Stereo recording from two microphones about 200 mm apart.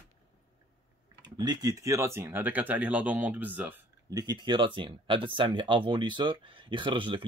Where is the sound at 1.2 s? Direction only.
20° right (ahead or behind).